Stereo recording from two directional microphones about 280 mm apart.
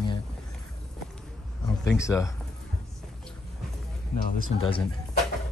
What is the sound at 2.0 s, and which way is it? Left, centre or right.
Speech, centre.